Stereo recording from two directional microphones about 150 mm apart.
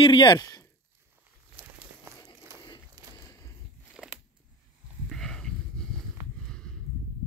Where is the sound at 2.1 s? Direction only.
20° right (ahead or behind).